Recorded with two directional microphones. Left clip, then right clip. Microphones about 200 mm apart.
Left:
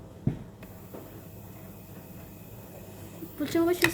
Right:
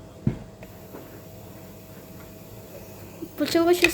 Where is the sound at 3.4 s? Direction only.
25° right (ahead or behind).